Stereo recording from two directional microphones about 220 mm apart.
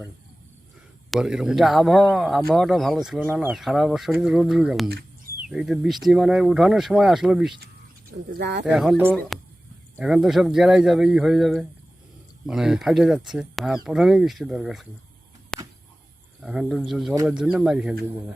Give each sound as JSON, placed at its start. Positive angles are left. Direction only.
{"t": 1.1, "sound": "speech", "side_deg": -5}
{"t": 4.9, "sound": "bird", "side_deg": -45}
{"t": 5.5, "sound": "speech", "side_deg": 0}
{"t": 8.4, "sound": "speech", "side_deg": -50}
{"t": 8.6, "sound": "speech", "side_deg": -5}
{"t": 15.5, "sound": "a sound", "side_deg": 5}
{"t": 16.4, "sound": "speech", "side_deg": -5}